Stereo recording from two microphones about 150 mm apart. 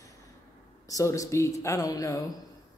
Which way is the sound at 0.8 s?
20° left (ahead or behind).